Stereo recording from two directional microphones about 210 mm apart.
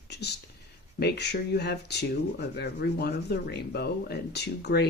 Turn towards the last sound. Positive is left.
turn(degrees=50)  # may be behind; listen again after turning